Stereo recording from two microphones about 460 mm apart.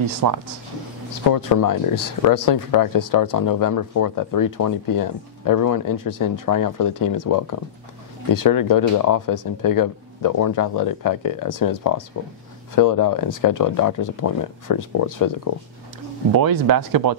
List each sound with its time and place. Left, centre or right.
0.0 s speech: right
1.3 s speech: left
16.3 s speech: right